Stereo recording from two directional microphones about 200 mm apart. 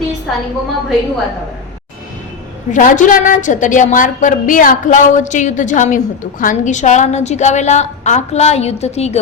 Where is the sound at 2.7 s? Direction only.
40° left (ahead or behind).